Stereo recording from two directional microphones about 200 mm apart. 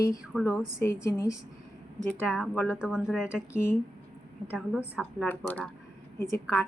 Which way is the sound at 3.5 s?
10° left (ahead or behind).